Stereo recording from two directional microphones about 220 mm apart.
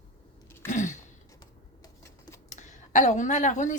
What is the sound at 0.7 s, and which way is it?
Gasp, 35° left (ahead or behind).